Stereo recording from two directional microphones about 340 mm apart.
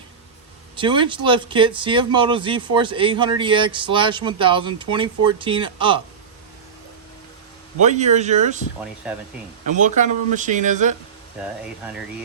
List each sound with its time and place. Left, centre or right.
0.8 s speech: centre
7.8 s speech: right
9.0 s speech: centre
9.6 s speech: right